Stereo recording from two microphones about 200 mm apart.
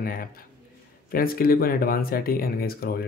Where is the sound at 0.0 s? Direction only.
45° left (ahead or behind).